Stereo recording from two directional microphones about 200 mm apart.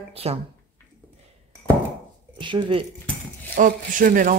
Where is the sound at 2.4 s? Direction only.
25° right (ahead or behind).